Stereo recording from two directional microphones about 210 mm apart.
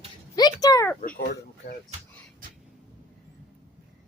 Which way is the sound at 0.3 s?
15° left (ahead or behind).